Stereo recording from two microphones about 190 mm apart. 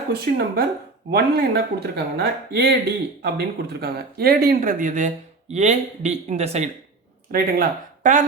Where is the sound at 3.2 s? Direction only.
55° right (ahead or behind); by 6.7 s 35° right (ahead or behind).